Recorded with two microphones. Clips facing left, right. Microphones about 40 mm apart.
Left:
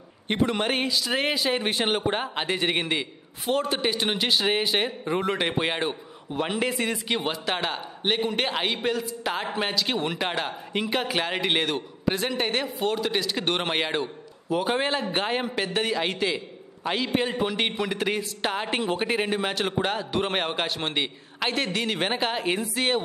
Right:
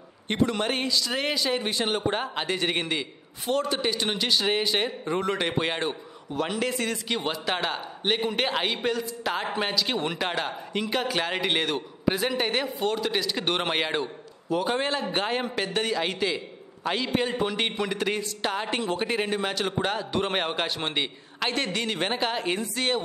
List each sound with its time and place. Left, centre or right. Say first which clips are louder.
0.3 s a man's voice: left 1 dB; centre
1.6 s speech: left 2 dB; left
2.3 s a man's voice: left 1 dB; centre
7.4 s a man's voice: even; centre